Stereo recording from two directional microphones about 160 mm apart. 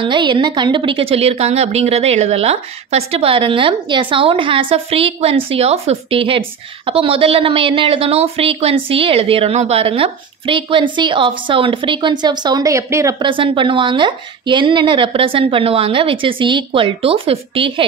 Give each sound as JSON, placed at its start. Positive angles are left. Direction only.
{"t": 0.0, "sound": "a woman's voice", "side_deg": -30}
{"t": 13.2, "sound": "a woman's voice", "side_deg": -30}